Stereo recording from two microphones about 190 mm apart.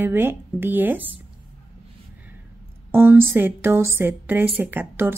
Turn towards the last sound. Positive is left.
turn(degrees=-10)  # may be behind; listen again after turning